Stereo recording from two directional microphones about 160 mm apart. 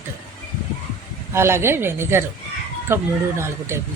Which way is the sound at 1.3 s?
15° right (ahead or behind).